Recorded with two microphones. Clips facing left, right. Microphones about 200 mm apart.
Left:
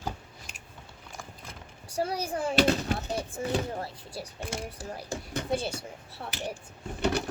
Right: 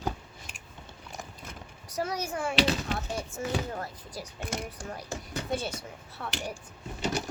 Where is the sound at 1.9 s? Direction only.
30° left (ahead or behind).